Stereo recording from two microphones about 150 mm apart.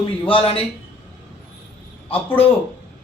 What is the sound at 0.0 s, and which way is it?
Speech, 35° left (ahead or behind).